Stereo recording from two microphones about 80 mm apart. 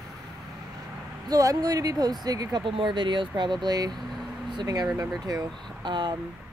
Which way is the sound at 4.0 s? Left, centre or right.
Centre.